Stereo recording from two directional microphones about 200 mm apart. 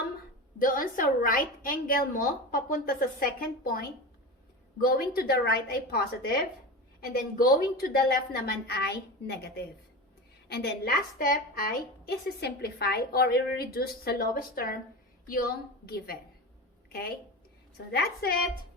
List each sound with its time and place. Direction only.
0.6 s a woman's voice: 45° left (ahead or behind)
17.9 s a woman's voice: 50° left (ahead or behind)